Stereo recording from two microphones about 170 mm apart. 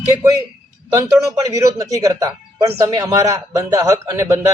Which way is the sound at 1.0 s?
20° right (ahead or behind).